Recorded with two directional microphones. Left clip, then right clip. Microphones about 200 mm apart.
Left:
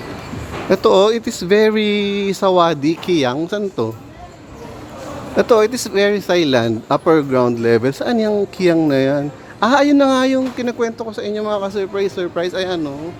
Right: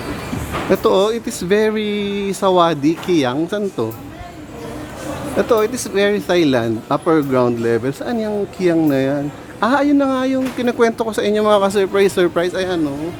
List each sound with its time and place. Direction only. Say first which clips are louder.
0.7 s speech: left 3 dB; 15° left (ahead or behind)
5.4 s speech: left 3 dB; 20° left (ahead or behind)
10.8 s speech: right 5 dB; 10° right (ahead or behind)
12.3 s speech: right 1 dB; 10° left (ahead or behind)